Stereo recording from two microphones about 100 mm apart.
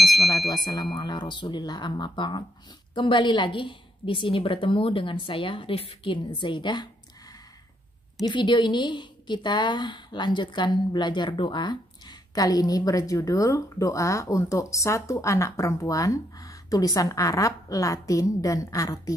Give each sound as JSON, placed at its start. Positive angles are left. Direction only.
{"t": 0.0, "sound": "speech", "side_deg": 0}
{"t": 0.9, "sound": "a woman's voice", "side_deg": 45}
{"t": 8.2, "sound": "a woman's voice", "side_deg": 45}